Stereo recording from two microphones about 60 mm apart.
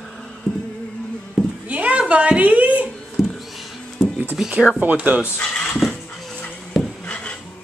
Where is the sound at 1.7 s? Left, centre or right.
Right.